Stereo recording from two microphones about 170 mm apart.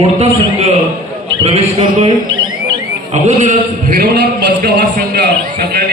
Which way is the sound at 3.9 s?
70° right (ahead or behind).